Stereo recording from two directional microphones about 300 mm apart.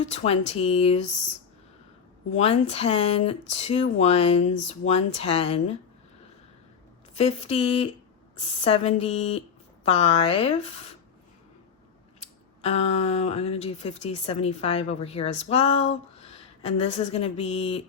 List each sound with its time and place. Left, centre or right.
0.0 s a woman's voice: left
2.3 s a woman's voice: left
7.1 s a woman's voice: left
12.6 s a woman's voice: left